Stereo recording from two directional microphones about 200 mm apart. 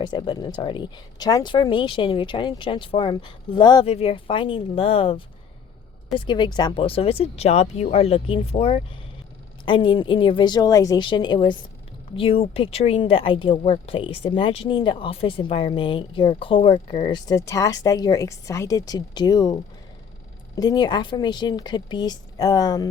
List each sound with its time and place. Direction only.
0.0 s speech: 20° left (ahead or behind)
20.6 s speech: 20° left (ahead or behind)